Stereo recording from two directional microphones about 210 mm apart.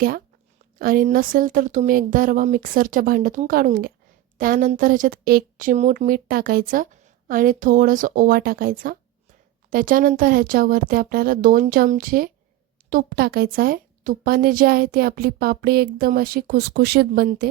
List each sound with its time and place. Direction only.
0.8 s a woman's voice: 40° right (ahead or behind)